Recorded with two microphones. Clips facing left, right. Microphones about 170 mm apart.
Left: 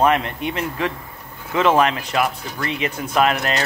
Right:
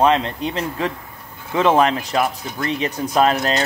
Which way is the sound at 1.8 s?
30° right (ahead or behind).